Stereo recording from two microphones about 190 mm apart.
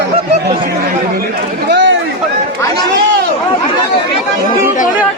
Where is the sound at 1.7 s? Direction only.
70° right (ahead or behind).